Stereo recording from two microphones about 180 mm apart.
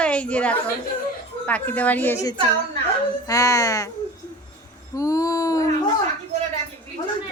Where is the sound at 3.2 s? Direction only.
20° left (ahead or behind).